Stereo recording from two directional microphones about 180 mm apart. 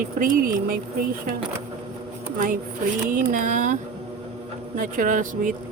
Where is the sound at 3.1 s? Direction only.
45° right (ahead or behind).